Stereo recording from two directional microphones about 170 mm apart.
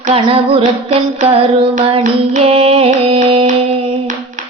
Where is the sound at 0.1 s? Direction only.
35° right (ahead or behind).